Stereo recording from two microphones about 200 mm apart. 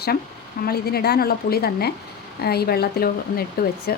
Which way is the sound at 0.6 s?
50° left (ahead or behind).